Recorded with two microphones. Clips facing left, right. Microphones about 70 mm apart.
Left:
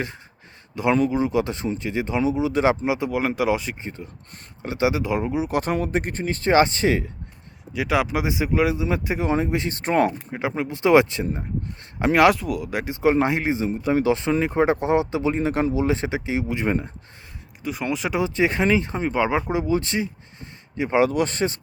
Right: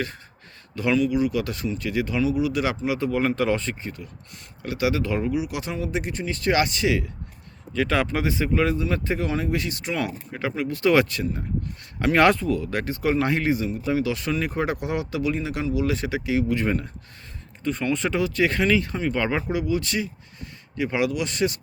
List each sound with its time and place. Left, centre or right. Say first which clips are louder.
0.9 s speech: right 1 dB; left; by 3.8 s centre
3.8 s speech: left 1 dB; left
5.4 s speech: left 5 dB; left
7.7 s speech: left 1 dB; centre; by 10.1 s left
10.3 s speech: left 1 dB; left
12.1 s speech: left 1 dB; centre
17.6 s speech: right 1 dB; centre
18.2 s speech: left 4 dB; left
19.1 s speech: left 5 dB; centre
19.5 s speech: left 2 dB; left